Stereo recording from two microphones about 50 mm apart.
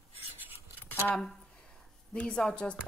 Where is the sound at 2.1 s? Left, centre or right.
Centre.